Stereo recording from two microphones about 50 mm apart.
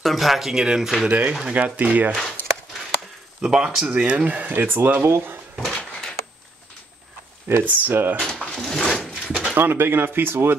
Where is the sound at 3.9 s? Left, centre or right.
Right.